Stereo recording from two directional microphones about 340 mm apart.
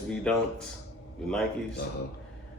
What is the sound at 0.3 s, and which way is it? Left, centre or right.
Speech, centre.